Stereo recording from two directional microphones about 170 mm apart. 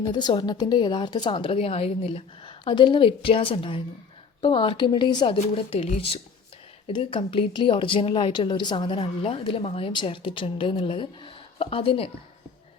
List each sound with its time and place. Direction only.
0.1 s speech: 25° left (ahead or behind)